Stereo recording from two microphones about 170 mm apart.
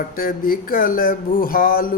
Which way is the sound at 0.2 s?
55° left (ahead or behind).